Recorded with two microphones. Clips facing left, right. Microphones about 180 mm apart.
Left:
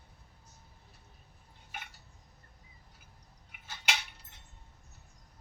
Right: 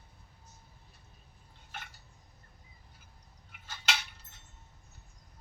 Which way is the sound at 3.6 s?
10° left (ahead or behind).